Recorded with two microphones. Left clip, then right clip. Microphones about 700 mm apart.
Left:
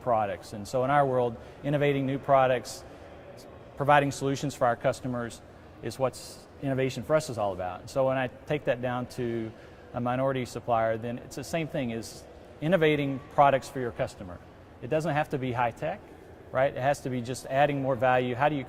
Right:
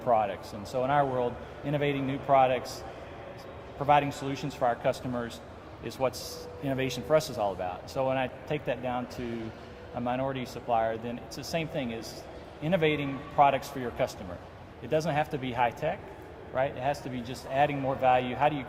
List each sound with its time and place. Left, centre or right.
0.0 s a man's voice: left
3.8 s a man's voice: left
10.1 s a man's voice: left